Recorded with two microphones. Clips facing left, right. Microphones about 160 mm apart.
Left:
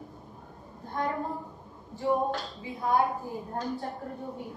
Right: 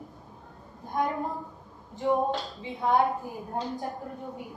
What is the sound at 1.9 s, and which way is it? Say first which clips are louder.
A woman's voice: right 2 dB; 20° right (ahead or behind).